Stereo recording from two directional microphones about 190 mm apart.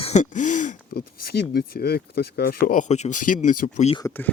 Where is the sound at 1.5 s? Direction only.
55° left (ahead or behind).